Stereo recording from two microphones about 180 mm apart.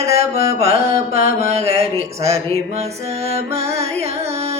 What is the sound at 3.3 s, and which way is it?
Music, 35° right (ahead or behind).